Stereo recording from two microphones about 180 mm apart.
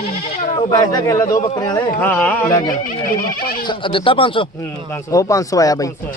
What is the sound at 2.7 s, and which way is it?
Speech, 50° left (ahead or behind).